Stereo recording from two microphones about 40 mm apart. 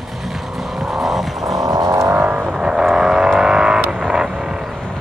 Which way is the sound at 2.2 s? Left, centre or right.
Right.